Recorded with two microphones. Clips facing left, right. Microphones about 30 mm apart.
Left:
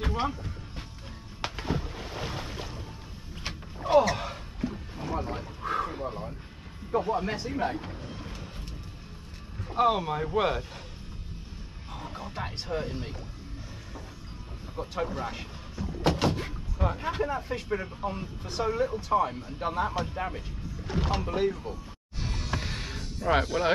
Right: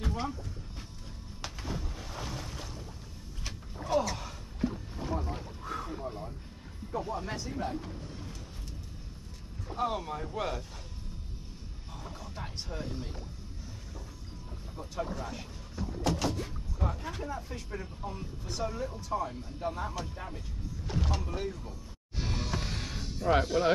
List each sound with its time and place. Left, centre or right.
0.0 s a sound: left
1.4 s boat: left
3.4 s a sound: left
4.9 s boat: left
5.6 s a sound: left
6.9 s speech: left
9.8 s speech: left
11.9 s a sound: left
14.8 s speech: left
20.8 s speech: left
21.1 s speech: left
22.2 s music: centre
22.5 s music: centre
23.4 s speech: centre